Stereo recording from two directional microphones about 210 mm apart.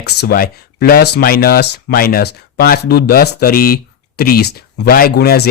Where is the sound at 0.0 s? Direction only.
50° left (ahead or behind).